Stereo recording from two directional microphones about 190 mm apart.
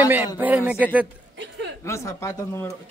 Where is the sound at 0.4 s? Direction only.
10° right (ahead or behind).